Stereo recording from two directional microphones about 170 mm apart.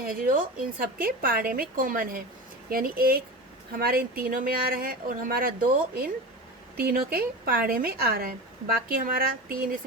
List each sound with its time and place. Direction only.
0.0 s speech: 55° right (ahead or behind)